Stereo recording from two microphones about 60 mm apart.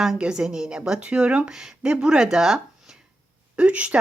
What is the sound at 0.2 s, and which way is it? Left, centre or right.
Speech, centre.